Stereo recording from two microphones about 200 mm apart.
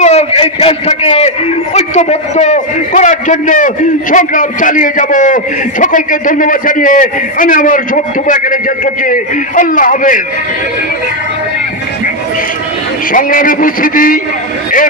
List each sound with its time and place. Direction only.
0.0 s a man's voice: 30° left (ahead or behind)
13.1 s a man's voice: 45° left (ahead or behind)